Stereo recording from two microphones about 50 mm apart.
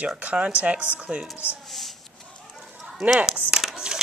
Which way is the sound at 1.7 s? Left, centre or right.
Centre.